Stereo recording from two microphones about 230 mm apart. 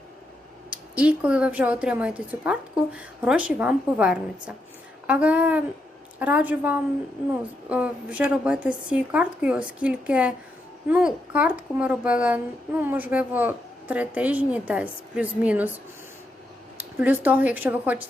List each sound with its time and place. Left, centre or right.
0.7 s a woman's voice: centre
16.7 s speech: centre